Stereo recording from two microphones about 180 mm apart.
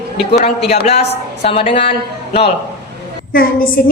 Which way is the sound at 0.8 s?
35° left (ahead or behind).